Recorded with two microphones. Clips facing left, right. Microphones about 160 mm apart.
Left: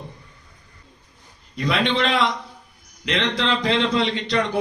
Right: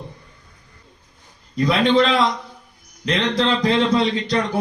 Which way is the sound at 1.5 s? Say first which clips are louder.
Right 6 dB; 40° right (ahead or behind).